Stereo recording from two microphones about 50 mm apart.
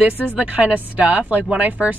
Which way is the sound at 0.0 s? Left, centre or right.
Right.